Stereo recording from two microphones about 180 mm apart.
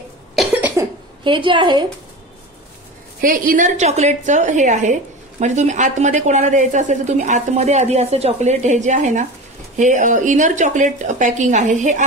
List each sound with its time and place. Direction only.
0.4 s cough: 10° right (ahead or behind)
1.2 s a woman's voice: 25° right (ahead or behind)
3.2 s a woman's voice: 50° right (ahead or behind)